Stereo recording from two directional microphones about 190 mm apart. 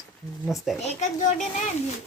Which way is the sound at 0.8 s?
40° left (ahead or behind).